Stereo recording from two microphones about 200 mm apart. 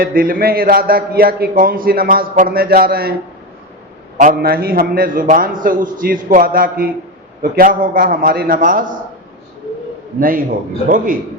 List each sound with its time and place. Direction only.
0.0 s a man's voice: 45° right (ahead or behind)
4.2 s a man's voice: 45° right (ahead or behind)
10.2 s a man's voice: 45° right (ahead or behind)